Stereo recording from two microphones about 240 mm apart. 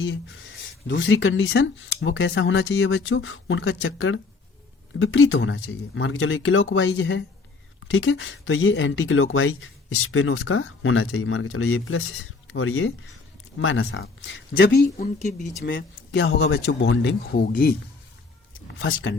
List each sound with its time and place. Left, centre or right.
0.0 s a man's voice: left
15.6 s a man's voice: left
18.8 s a man's voice: left